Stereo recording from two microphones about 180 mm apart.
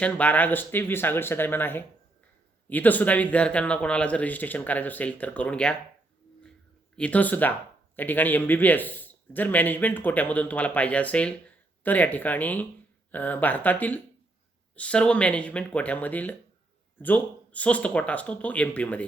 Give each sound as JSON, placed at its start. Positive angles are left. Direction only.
{"t": 0.0, "sound": "a man's voice", "side_deg": 10}
{"t": 6.9, "sound": "a man's voice", "side_deg": 5}